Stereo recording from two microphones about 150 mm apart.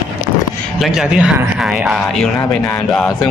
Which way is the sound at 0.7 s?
Centre (ahead or behind).